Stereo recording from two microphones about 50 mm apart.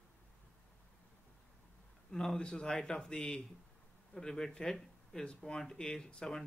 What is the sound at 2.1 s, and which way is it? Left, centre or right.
Speech, centre.